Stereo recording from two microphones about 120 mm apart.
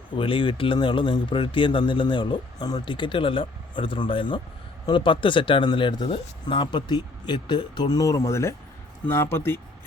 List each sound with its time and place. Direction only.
0.1 s speech: 45° left (ahead or behind); by 9.6 s 20° left (ahead or behind)